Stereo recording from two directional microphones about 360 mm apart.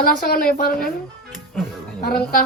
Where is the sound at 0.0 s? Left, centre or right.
Left.